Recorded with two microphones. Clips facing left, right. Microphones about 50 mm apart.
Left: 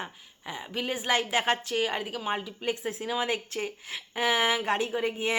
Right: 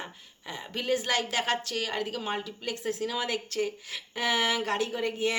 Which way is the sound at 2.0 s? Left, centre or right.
Centre.